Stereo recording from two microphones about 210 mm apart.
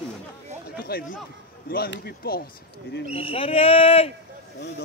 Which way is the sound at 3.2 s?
25° left (ahead or behind).